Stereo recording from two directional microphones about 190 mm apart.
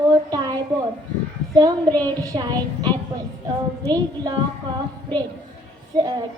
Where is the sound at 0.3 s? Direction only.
20° right (ahead or behind).